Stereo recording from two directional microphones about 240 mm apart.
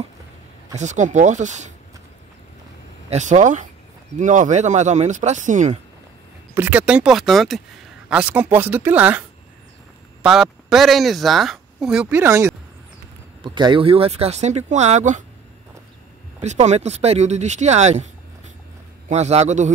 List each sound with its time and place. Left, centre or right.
0.7 s speech: right
3.1 s speech: right
6.5 s speech: centre
10.2 s speech: centre; by 15.2 s right
16.3 s speech: right